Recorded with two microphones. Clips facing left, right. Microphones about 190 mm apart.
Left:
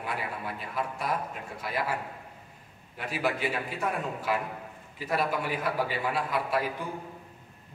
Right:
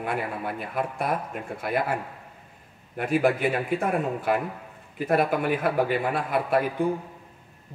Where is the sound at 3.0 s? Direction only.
50° right (ahead or behind).